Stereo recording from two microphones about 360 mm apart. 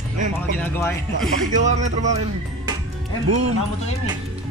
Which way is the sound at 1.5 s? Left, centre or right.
Centre.